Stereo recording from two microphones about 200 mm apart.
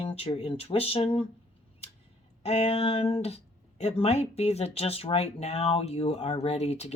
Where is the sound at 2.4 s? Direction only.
30° left (ahead or behind).